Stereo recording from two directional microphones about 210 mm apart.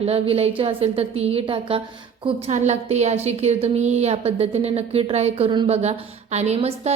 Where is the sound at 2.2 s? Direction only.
35° right (ahead or behind).